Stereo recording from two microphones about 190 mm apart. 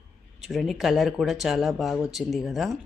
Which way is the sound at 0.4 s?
Centre (ahead or behind).